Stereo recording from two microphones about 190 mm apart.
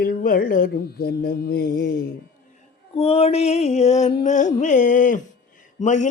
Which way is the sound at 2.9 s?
30° left (ahead or behind).